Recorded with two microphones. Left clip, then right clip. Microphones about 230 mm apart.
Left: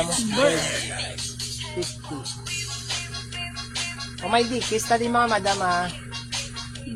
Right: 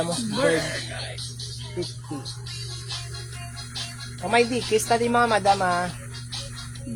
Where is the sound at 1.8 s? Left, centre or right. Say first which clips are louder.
Right 2 dB; left.